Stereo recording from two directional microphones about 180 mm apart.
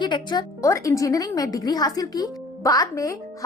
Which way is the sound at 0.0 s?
25° left (ahead or behind).